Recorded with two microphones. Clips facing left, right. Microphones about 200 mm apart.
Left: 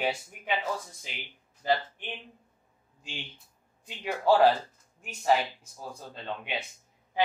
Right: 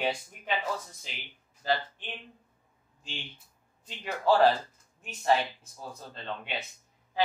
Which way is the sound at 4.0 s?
10° left (ahead or behind).